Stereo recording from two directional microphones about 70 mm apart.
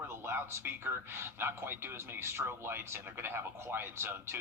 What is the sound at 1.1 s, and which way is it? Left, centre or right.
Speech, right.